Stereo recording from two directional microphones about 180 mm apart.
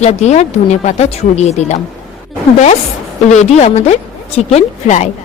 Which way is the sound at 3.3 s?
40° left (ahead or behind).